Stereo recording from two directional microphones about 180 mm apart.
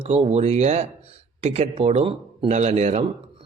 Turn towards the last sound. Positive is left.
turn(degrees=-40)  # may be behind; listen again after turning